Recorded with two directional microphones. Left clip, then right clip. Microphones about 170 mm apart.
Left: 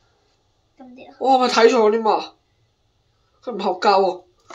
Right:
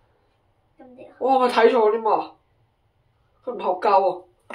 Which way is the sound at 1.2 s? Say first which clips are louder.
Left 3 dB; 15° left (ahead or behind).